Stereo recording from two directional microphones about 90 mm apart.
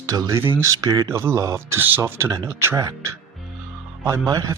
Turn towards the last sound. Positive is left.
turn(degrees=-40)  # may be behind; listen again after turning